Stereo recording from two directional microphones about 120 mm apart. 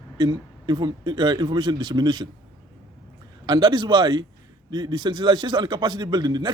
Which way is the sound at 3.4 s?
35° right (ahead or behind).